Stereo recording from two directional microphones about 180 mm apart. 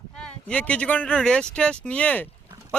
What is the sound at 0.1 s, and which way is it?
Speech, 5° left (ahead or behind).